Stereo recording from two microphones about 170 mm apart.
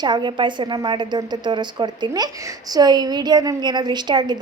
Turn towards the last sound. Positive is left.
turn(degrees=-25)  # may be behind; listen again after turning